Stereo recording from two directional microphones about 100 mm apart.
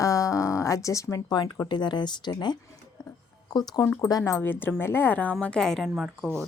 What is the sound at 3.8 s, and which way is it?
A woman's voice, 25° left (ahead or behind).